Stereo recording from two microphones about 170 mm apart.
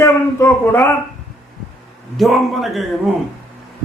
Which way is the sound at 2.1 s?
Centre (ahead or behind).